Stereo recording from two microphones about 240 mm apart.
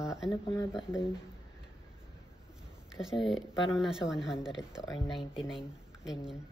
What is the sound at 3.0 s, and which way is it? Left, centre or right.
Speech, centre.